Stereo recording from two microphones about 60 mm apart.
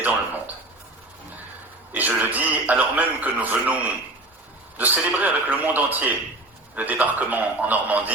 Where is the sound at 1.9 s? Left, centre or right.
Right.